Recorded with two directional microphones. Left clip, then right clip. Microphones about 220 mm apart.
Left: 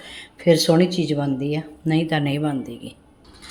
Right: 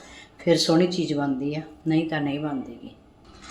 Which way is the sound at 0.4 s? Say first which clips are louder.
Left 4 dB; 30° left (ahead or behind).